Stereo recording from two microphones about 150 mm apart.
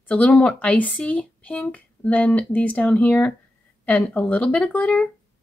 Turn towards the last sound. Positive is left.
turn(degrees=10)  # may be behind; listen again after turning